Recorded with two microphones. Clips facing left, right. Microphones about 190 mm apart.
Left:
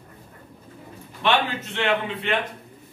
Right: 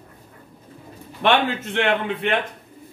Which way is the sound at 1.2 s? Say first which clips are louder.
Right 3 dB; 55° right (ahead or behind).